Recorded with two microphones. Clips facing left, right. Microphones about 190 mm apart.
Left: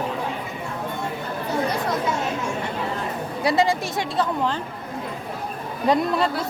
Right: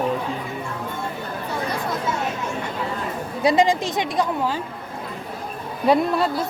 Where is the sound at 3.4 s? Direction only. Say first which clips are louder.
Right 3 dB; 15° right (ahead or behind).